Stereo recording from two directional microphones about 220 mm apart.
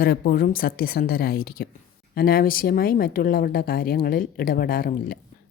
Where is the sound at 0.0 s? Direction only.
40° left (ahead or behind).